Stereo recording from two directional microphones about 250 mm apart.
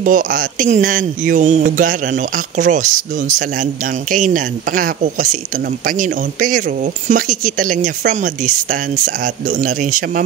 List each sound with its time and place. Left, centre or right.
0.0 s speech: right